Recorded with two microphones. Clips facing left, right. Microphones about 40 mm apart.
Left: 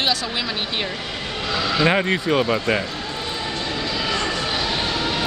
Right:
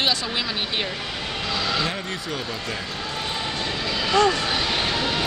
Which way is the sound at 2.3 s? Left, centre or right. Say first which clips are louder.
Left 12 dB; left.